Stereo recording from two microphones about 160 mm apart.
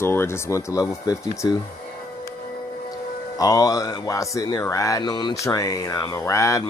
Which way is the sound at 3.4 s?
20° left (ahead or behind).